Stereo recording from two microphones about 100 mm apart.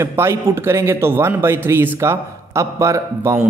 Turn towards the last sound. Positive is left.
turn(degrees=-30)  # may be behind; listen again after turning